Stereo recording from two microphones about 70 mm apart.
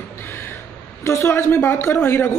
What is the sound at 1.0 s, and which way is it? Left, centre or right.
A man's voice, left.